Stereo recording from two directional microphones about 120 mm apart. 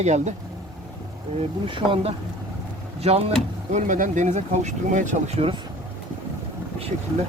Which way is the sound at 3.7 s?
90° right.